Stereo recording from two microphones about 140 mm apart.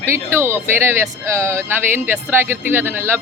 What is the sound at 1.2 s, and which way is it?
Speech, 20° right (ahead or behind).